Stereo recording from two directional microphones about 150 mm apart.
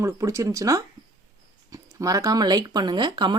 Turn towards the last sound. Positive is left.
turn(degrees=-30)  # may be behind; listen again after turning